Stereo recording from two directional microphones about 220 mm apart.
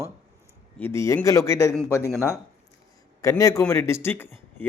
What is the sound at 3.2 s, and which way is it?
A man's voice, 15° left (ahead or behind).